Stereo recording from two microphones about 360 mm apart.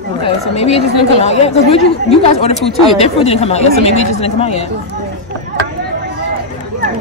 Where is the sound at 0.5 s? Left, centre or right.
Centre.